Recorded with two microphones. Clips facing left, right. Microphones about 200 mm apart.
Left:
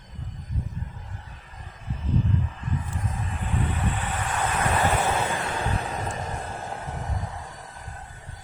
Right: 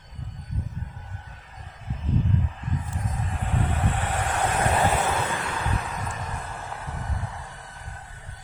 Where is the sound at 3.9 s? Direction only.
75° right (ahead or behind).